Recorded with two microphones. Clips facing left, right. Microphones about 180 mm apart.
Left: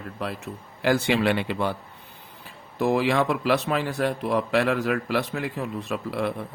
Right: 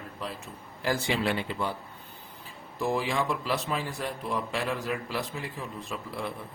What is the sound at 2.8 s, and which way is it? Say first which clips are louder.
A man's voice: left 7 dB; 70° left (ahead or behind).